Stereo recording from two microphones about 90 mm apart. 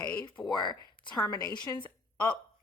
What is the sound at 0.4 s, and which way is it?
A woman's voice, 60° left (ahead or behind).